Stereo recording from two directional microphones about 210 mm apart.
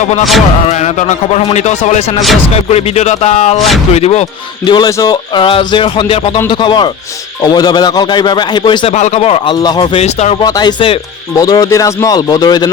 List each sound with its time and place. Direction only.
0.0 s a man's voice: 35° left (ahead or behind)
10.4 s a man's voice: 20° left (ahead or behind)